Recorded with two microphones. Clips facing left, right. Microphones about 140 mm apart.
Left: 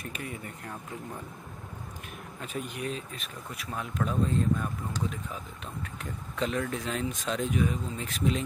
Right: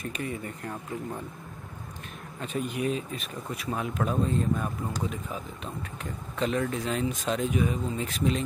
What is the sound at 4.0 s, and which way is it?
Speech, 20° right (ahead or behind).